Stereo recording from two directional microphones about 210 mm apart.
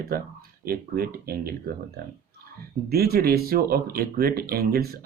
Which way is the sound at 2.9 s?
45° right (ahead or behind).